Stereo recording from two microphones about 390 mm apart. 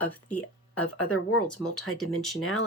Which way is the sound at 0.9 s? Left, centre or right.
Left.